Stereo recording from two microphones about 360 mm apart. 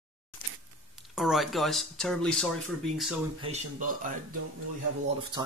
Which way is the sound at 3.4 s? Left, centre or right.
Centre.